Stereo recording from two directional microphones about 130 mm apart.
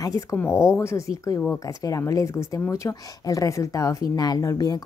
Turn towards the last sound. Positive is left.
turn(degrees=30)  # may be behind; listen again after turning